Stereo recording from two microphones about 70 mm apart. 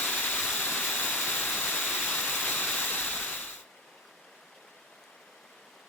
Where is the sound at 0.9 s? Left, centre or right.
Left.